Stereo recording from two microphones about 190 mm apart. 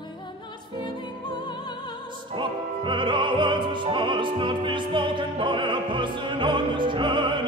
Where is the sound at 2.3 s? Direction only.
25° right (ahead or behind).